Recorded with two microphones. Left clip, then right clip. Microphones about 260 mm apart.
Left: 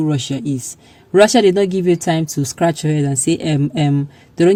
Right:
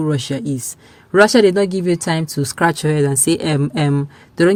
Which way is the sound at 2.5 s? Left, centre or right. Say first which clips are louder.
Right 2 dB; right.